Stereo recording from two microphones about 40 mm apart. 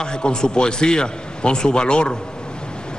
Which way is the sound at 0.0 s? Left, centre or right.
Left.